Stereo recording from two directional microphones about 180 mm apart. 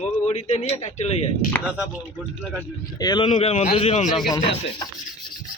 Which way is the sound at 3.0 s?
25° left (ahead or behind).